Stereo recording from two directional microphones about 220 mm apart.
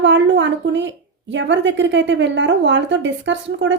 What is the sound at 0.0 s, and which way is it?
Speech, 55° right (ahead or behind).